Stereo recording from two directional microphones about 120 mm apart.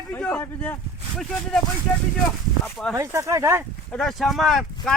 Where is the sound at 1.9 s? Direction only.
10° left (ahead or behind).